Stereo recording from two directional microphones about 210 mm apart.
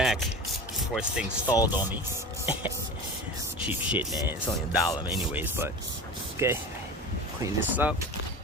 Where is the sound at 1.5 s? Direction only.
20° left (ahead or behind).